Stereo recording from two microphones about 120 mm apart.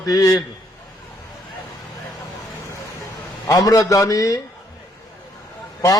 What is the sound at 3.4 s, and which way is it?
Speech, 30° left (ahead or behind).